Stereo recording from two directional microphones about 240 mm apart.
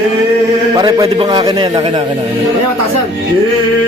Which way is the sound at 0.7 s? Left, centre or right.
Centre.